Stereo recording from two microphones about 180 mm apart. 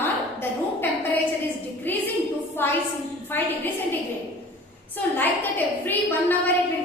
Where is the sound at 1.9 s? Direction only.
10° left (ahead or behind).